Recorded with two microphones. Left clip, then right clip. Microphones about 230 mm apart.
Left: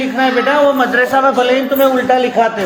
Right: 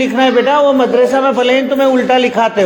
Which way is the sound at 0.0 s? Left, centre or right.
Right.